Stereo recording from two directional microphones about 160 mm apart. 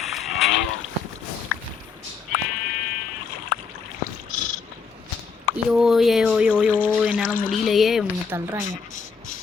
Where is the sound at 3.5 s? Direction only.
70° left (ahead or behind).